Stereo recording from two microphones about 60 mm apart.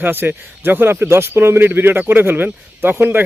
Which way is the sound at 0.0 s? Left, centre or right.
Right.